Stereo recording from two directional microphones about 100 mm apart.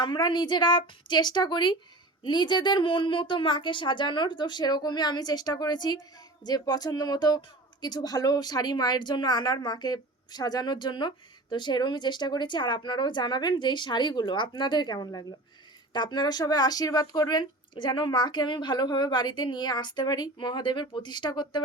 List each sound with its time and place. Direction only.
0.0 s a woman's voice: 50° left (ahead or behind)